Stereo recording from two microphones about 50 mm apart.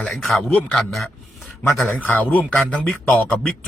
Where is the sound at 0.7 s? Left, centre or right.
Centre.